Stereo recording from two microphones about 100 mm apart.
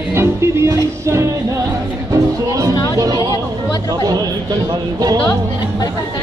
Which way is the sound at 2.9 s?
40° right (ahead or behind).